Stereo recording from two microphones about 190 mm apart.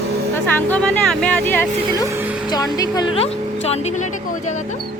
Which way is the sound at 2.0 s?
10° right (ahead or behind).